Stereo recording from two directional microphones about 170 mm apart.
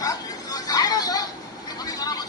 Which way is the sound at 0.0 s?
20° left (ahead or behind).